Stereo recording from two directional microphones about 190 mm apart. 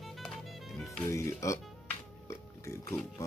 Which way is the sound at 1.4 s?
15° left (ahead or behind).